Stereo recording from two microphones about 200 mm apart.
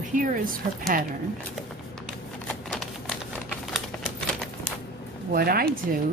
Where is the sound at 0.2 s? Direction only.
40° right (ahead or behind).